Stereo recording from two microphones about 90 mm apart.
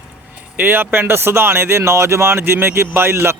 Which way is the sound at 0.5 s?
20° right (ahead or behind).